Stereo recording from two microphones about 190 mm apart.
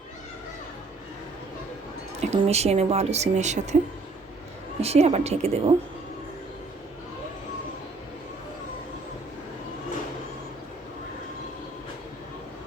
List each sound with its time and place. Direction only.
2.3 s speech: 35° right (ahead or behind)
4.8 s speech: 35° right (ahead or behind)